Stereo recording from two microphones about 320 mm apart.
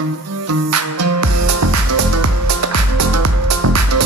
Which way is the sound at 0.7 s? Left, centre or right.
Right.